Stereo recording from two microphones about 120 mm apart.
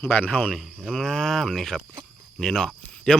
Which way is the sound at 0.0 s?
15° left (ahead or behind).